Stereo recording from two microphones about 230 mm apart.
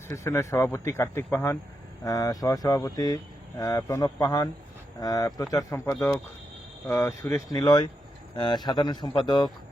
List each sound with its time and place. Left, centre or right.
0.1 s speech: centre